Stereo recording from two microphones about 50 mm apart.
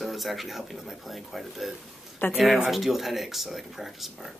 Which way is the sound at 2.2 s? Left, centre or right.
Left.